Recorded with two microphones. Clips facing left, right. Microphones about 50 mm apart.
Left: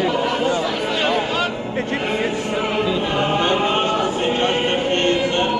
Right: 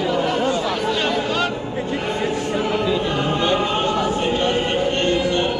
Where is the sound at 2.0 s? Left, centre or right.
Left.